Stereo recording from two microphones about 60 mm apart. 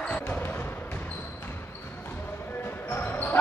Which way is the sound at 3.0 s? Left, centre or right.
Left.